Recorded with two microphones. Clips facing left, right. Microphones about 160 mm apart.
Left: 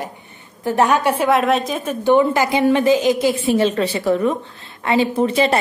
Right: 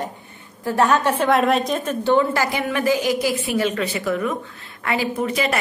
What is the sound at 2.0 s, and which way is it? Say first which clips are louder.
A woman's voice: left 5 dB; 15° left (ahead or behind).